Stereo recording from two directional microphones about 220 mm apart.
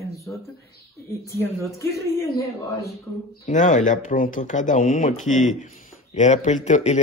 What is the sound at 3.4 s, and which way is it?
A man's voice, 35° left (ahead or behind).